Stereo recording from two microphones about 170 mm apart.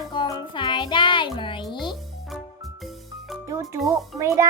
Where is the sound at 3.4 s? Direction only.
20° right (ahead or behind).